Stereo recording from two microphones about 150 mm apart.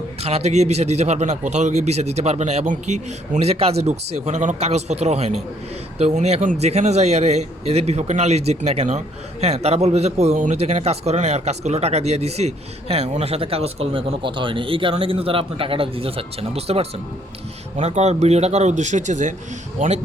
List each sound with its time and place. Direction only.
0.2 s a man's voice: 45° right (ahead or behind)